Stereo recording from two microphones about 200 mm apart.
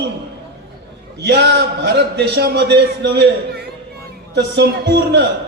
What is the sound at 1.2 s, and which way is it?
A man's voice, 60° right (ahead or behind).